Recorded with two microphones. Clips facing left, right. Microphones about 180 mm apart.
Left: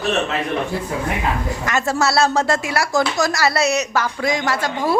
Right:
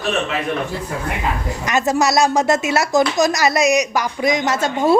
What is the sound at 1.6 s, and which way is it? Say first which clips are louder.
A woman's voice: right 3 dB; 20° right (ahead or behind).